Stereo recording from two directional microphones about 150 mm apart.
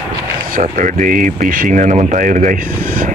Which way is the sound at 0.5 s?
60° right (ahead or behind).